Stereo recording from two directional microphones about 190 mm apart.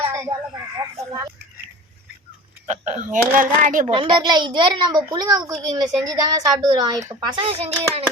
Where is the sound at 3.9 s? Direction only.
25° right (ahead or behind).